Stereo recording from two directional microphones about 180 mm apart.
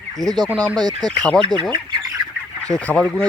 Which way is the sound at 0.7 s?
25° right (ahead or behind).